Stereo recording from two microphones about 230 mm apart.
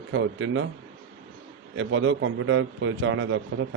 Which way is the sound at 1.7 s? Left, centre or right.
Right.